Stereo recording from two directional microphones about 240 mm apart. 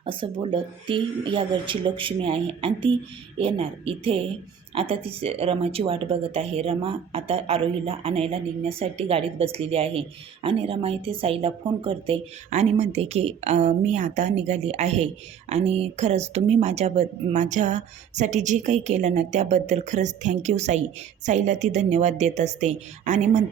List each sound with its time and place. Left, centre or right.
0.0 s speech: right